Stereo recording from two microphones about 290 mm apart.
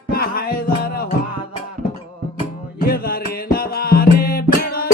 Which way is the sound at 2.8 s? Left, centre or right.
Left.